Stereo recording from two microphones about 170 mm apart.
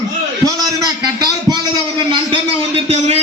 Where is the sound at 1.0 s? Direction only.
25° right (ahead or behind).